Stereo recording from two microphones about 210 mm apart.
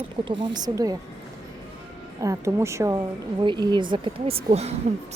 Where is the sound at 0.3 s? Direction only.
25° right (ahead or behind).